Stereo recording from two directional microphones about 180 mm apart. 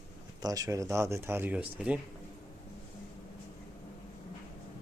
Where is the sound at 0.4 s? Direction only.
20° right (ahead or behind).